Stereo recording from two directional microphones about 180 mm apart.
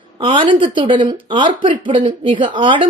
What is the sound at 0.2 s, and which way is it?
Speech, 30° right (ahead or behind).